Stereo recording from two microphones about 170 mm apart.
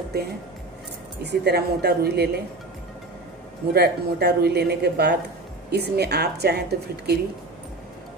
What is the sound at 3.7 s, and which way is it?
Speech, 70° right (ahead or behind).